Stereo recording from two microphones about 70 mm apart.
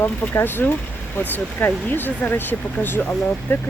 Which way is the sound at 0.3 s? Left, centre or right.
Left.